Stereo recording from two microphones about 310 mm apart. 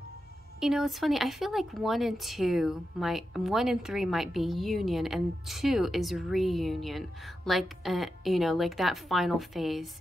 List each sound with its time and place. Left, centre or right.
0.6 s speech: centre